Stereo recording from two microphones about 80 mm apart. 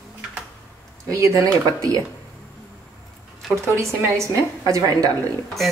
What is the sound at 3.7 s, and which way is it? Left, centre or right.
Speech, right.